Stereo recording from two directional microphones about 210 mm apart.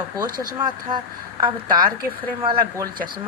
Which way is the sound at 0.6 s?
20° right (ahead or behind).